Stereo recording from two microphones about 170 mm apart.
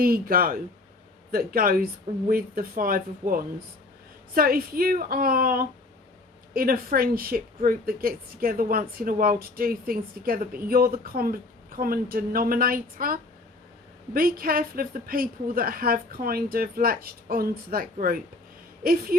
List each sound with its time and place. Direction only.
0.0 s a woman's voice: 60° right (ahead or behind)